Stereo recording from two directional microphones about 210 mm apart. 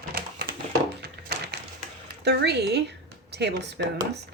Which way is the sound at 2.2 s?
50° right (ahead or behind).